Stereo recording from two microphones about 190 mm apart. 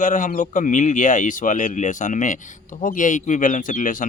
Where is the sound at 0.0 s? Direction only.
45° left (ahead or behind).